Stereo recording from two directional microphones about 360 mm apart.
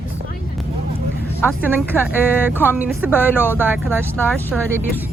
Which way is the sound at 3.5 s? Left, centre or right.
Centre.